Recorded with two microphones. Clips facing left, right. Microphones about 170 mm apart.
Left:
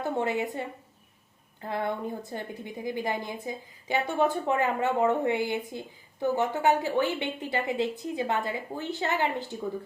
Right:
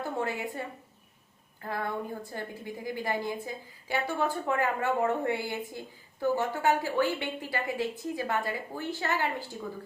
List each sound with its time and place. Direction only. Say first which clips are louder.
0.0 s a woman's voice: left 4 dB; 20° left (ahead or behind)
1.6 s a woman's voice: left 3 dB; 25° left (ahead or behind)